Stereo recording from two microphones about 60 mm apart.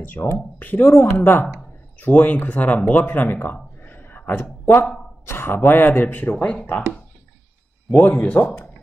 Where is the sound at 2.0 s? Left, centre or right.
Left.